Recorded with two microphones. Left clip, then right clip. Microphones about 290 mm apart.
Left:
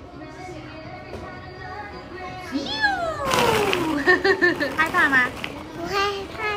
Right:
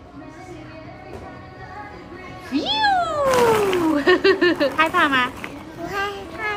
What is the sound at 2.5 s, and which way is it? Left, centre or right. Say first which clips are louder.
Cat: right 5 dB; centre.